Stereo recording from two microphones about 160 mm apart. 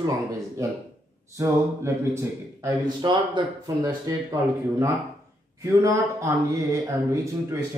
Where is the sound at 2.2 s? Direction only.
20° right (ahead or behind).